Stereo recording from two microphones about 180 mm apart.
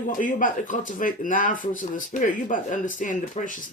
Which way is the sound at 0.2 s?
45° left (ahead or behind).